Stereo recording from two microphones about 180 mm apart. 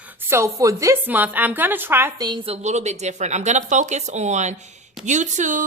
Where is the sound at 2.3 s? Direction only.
30° right (ahead or behind).